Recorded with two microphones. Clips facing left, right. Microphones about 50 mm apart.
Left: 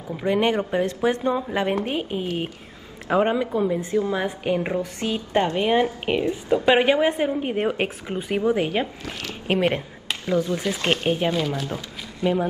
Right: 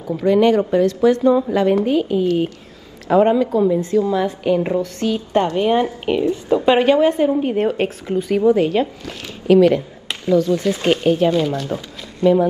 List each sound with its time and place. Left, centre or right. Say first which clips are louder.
0.2 s a woman's voice: right 7 dB; left
3.9 s a woman's voice: right 6 dB; left
8.1 s a woman's voice: right 8 dB; left
9.5 s speech: right 10 dB; left
10.2 s a woman's voice: right 7 dB; centre
11.3 s speech: right 6 dB; centre